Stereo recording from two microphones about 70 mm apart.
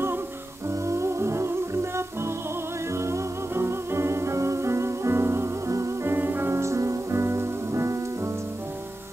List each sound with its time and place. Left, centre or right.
0.7 s music: right
6.1 s music: right